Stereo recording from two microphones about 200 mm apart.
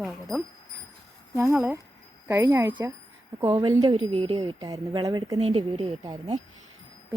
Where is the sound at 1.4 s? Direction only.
10° right (ahead or behind).